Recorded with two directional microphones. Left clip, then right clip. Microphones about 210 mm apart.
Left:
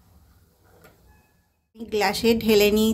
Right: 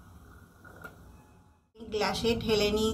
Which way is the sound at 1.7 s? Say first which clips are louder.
Left 7 dB; 55° left (ahead or behind).